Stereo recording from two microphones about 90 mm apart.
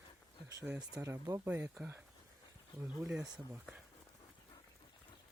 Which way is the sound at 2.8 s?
10° right (ahead or behind).